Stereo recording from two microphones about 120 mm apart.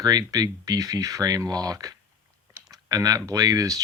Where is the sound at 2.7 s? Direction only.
30° right (ahead or behind).